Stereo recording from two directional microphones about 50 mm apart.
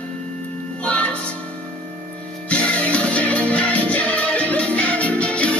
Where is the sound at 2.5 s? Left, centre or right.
Left.